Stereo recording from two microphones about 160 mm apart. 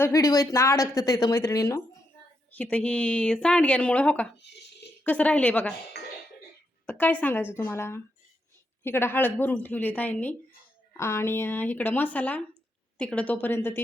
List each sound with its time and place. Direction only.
0.0 s speech: 20° left (ahead or behind)
2.5 s speech: 10° left (ahead or behind)
4.4 s a sound: 90° left
5.0 s speech: 10° left (ahead or behind)
6.0 s chink: 90° left
6.8 s speech: 10° left (ahead or behind)